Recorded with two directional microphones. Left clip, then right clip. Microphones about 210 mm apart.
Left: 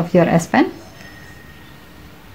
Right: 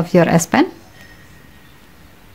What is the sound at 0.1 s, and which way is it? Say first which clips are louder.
Speech: right 1 dB; 35° right (ahead or behind).